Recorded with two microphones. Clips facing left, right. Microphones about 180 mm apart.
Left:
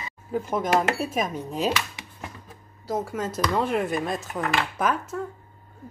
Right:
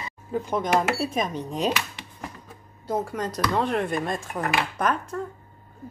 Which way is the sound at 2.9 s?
5° left (ahead or behind).